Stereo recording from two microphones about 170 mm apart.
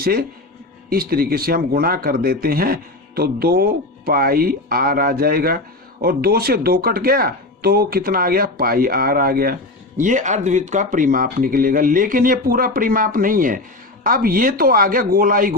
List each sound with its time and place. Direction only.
0.0 s speech: 60° right (ahead or behind)
10.0 s speech: 50° right (ahead or behind)